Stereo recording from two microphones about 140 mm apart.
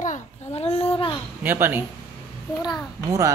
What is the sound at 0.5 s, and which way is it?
Speech, 45° left (ahead or behind).